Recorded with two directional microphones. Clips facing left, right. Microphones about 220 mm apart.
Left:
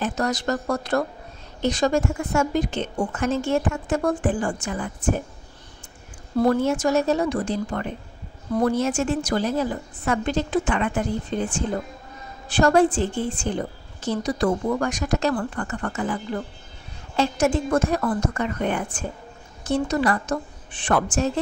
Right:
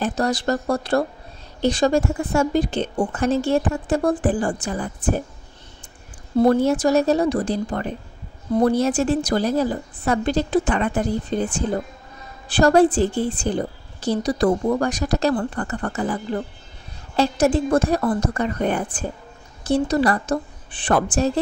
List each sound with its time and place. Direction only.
0.0 s a woman's voice: 35° right (ahead or behind)
6.3 s a woman's voice: 30° right (ahead or behind)
17.2 s a woman's voice: 35° right (ahead or behind)